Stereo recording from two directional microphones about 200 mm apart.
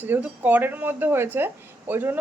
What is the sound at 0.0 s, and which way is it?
Speech, 10° right (ahead or behind).